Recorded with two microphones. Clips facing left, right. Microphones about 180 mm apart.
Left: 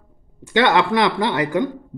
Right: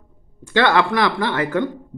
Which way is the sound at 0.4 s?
20° left (ahead or behind).